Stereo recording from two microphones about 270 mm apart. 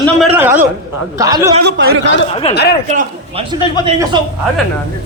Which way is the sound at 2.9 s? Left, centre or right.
Right.